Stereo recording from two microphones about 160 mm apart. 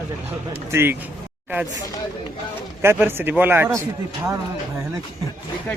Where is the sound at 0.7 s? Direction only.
15° right (ahead or behind).